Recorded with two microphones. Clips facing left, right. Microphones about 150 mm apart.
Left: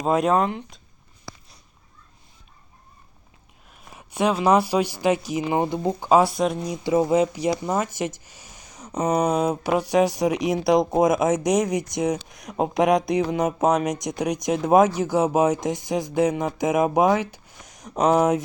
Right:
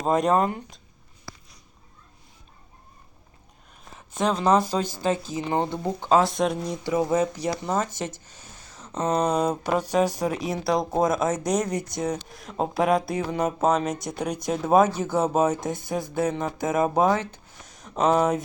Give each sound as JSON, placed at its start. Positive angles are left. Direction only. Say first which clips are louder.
{"t": 0.0, "sound": "speech", "louder": "left 1 dB", "side_deg": 0}
{"t": 3.9, "sound": "speech", "louder": "left 3 dB", "side_deg": 10}
{"t": 6.9, "sound": "speech", "louder": "left 4 dB", "side_deg": 15}